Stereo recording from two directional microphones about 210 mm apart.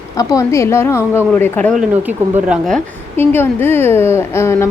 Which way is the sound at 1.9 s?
10° right (ahead or behind).